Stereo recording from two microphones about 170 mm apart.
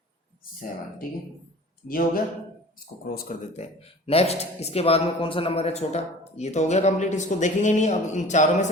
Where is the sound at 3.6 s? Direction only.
35° left (ahead or behind).